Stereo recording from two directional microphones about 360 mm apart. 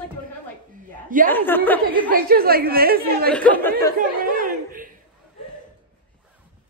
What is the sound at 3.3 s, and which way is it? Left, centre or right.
Speech, centre.